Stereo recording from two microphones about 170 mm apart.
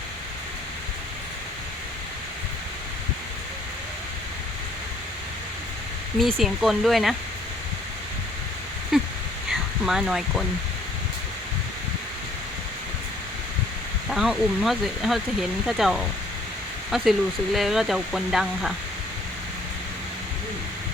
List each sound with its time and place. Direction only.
6.1 s speech: centre (ahead or behind)
8.9 s a sound: 5° right (ahead or behind)
14.1 s speech: centre (ahead or behind)